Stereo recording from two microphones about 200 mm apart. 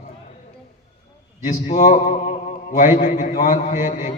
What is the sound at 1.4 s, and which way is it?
A man's voice, 40° left (ahead or behind).